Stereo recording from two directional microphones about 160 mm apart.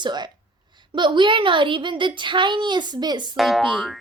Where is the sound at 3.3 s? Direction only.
Centre (ahead or behind).